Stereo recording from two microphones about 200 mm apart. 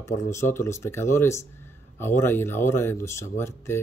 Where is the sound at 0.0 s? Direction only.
15° left (ahead or behind).